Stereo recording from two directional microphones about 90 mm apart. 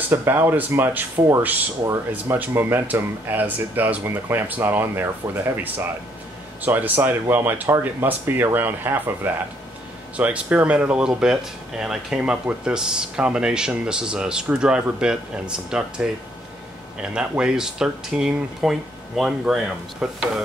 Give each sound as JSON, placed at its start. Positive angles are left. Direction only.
{"t": 0.1, "sound": "speech", "side_deg": -25}
{"t": 2.3, "sound": "speech", "side_deg": -20}
{"t": 10.1, "sound": "speech", "side_deg": -15}
{"t": 17.1, "sound": "speech", "side_deg": -10}